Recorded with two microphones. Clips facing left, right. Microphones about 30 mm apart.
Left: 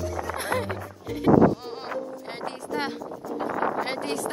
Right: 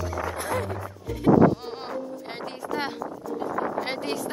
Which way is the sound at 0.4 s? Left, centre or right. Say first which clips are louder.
Left 3 dB; left.